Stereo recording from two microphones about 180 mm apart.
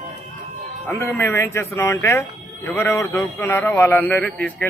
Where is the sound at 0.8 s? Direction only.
10° left (ahead or behind).